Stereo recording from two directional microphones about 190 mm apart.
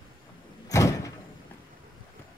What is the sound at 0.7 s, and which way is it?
Sliding door, 15° left (ahead or behind).